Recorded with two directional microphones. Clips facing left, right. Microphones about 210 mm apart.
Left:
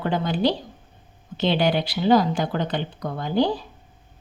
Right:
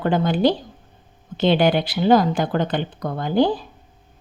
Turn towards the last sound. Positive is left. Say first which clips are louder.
# right 3 dB
turn(degrees=-50)  # may be behind; listen again after turning